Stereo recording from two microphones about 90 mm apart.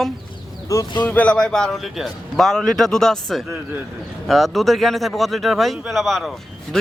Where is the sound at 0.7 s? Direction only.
40° left (ahead or behind).